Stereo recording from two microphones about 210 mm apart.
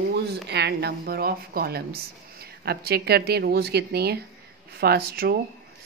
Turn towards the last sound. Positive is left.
turn(degrees=-45)  # may be behind; listen again after turning